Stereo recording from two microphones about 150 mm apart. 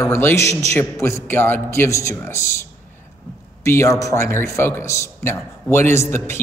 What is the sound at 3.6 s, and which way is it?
A man's voice, 20° left (ahead or behind).